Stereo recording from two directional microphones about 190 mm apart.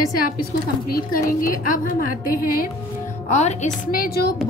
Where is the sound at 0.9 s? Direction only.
50° left (ahead or behind).